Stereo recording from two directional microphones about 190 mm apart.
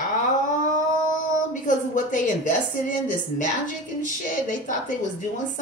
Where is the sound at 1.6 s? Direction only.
40° left (ahead or behind).